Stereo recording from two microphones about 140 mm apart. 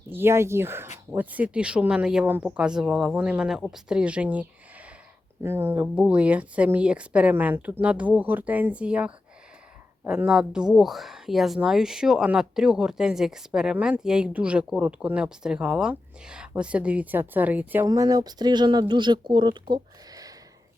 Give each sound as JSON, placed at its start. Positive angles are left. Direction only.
{"t": 0.1, "sound": "speech", "side_deg": -15}
{"t": 17.8, "sound": "speech", "side_deg": -25}